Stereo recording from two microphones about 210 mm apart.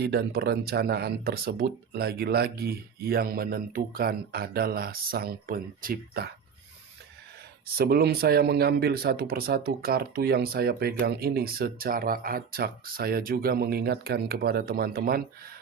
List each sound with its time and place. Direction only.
0.0 s speech: 50° right (ahead or behind)
7.8 s speech: 45° right (ahead or behind)